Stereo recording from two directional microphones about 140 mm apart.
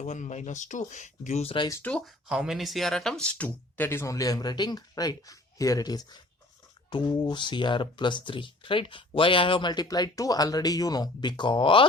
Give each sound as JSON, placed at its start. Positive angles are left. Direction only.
{"t": 0.0, "sound": "speech", "side_deg": 55}
{"t": 1.5, "sound": "speech", "side_deg": 25}
{"t": 1.8, "sound": "speech", "side_deg": 5}